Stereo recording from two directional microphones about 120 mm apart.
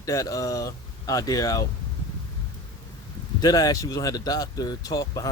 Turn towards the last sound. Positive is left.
turn(degrees=30)  # may be behind; listen again after turning